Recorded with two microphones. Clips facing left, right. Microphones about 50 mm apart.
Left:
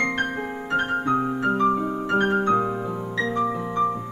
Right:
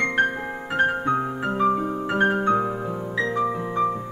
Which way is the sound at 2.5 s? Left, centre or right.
Centre.